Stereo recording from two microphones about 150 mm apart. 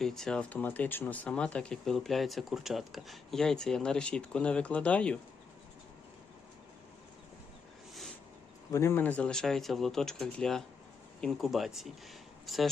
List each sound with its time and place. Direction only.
0.0 s speech: 5° left (ahead or behind)
8.7 s speech: 15° left (ahead or behind); by 12.7 s centre (ahead or behind)